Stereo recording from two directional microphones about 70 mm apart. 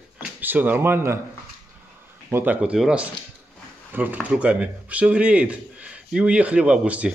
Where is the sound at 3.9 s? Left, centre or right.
Right.